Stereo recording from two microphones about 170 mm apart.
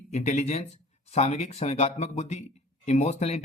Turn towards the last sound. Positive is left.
turn(degrees=40)  # may be behind; listen again after turning